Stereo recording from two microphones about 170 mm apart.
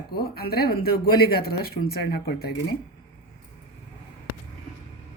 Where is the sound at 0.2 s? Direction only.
65° left (ahead or behind).